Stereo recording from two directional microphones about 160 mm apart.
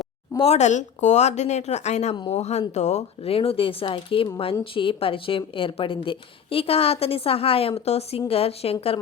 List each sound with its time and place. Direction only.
0.3 s a woman's voice: 40° left (ahead or behind)